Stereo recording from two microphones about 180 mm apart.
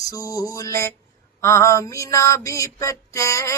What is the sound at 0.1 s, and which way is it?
Mantra, 20° left (ahead or behind).